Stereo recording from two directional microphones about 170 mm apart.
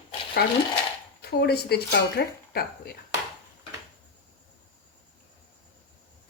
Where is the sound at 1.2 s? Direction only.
70° left (ahead or behind).